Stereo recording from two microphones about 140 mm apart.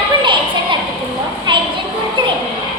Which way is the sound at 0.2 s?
35° right (ahead or behind).